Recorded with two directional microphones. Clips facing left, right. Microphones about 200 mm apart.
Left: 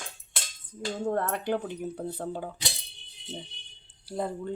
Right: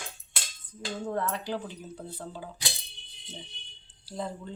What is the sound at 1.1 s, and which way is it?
Speech, 55° left (ahead or behind).